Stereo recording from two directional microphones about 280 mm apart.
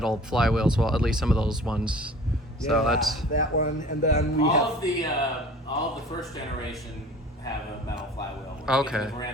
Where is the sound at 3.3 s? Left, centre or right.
Left.